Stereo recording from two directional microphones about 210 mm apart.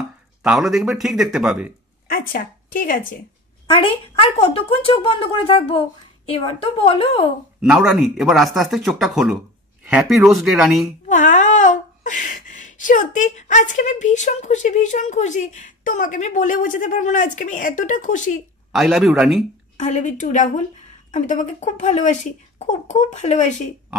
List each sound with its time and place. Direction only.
0.4 s speech: centre (ahead or behind)
2.0 s speech: 40° left (ahead or behind)
3.7 s speech: 25° left (ahead or behind)
7.6 s speech: centre (ahead or behind)
11.1 s speech: 35° left (ahead or behind)
18.7 s speech: centre (ahead or behind)
19.8 s speech: 35° left (ahead or behind)